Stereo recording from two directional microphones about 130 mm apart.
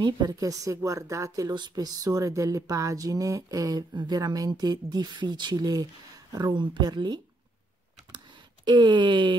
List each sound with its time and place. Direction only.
0.0 s a woman's voice: 30° right (ahead or behind)
8.6 s speech: 35° right (ahead or behind)